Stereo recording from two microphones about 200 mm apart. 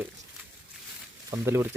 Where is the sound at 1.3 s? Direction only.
10° right (ahead or behind).